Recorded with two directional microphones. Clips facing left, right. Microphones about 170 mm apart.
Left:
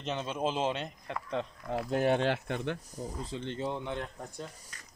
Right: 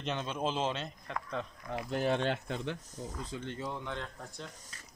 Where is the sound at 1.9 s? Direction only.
60° left (ahead or behind).